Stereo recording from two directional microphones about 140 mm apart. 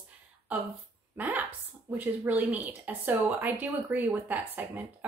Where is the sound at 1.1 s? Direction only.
10° right (ahead or behind).